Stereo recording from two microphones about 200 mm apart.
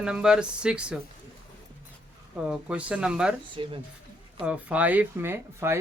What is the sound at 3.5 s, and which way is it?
Speech, 25° right (ahead or behind).